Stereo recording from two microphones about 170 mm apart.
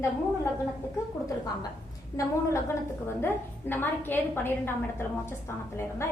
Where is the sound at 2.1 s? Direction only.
15° left (ahead or behind).